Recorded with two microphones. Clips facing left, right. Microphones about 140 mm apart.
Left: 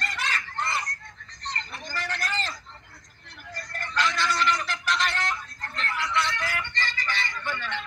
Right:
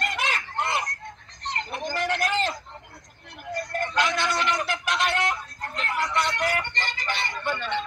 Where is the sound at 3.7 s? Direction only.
50° right (ahead or behind).